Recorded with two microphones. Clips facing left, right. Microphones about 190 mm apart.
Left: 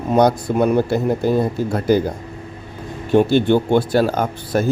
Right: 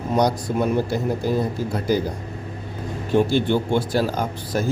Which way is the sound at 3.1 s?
65° left (ahead or behind).